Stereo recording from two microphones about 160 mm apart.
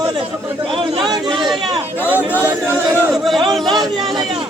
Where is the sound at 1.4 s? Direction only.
Centre (ahead or behind).